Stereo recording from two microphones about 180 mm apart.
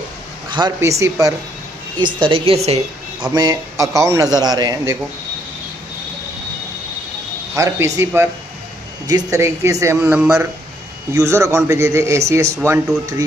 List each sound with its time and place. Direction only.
0.5 s a man's voice: 25° right (ahead or behind)
2.1 s a woman's voice: 30° right (ahead or behind)
3.3 s a man's voice: 20° right (ahead or behind)
7.5 s a man's voice: 15° right (ahead or behind)